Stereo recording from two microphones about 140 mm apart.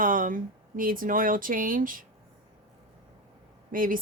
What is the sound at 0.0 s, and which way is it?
Speech, 75° right (ahead or behind).